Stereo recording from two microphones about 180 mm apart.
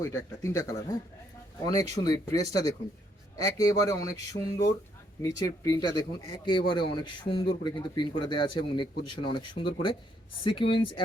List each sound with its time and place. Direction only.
0.0 s speech: 15° left (ahead or behind)